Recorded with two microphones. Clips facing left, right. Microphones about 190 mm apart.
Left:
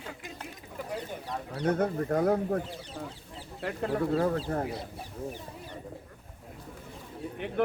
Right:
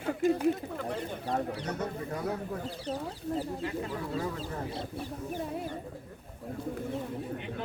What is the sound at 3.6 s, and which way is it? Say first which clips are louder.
Speech: left 5 dB; 55° left (ahead or behind).